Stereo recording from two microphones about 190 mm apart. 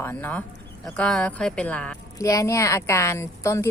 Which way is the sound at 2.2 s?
15° left (ahead or behind).